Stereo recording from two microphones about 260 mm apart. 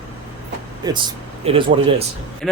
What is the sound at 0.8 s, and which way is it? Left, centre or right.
Speech, centre.